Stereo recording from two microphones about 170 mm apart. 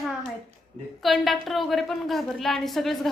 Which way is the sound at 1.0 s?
Centre (ahead or behind).